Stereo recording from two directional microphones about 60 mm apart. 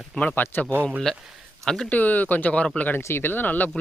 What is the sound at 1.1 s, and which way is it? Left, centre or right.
Speech, centre.